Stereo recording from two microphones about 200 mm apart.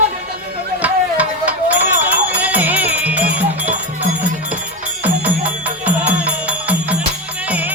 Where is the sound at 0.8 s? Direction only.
5° right (ahead or behind).